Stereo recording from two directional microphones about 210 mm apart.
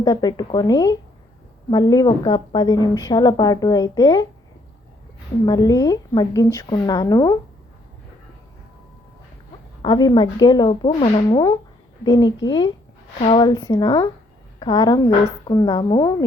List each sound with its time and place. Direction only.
0.0 s a woman's voice: 20° left (ahead or behind)
5.5 s a woman's voice: 20° left (ahead or behind)
9.8 s a woman's voice: 20° left (ahead or behind)